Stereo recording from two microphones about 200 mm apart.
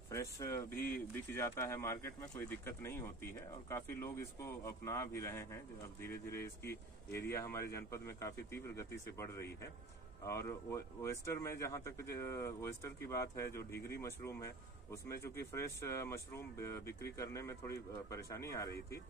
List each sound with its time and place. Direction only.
0.1 s speech: 15° left (ahead or behind)
6.6 s speech: 50° left (ahead or behind)
7.2 s speech: 15° left (ahead or behind)